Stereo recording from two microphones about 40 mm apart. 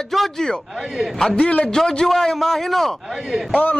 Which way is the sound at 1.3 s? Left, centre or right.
Left.